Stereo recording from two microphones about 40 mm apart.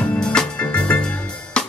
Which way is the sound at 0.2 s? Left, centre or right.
Left.